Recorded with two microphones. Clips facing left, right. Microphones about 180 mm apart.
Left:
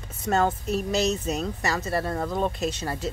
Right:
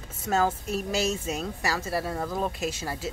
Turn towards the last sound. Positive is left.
turn(degrees=-5)  # may be behind; listen again after turning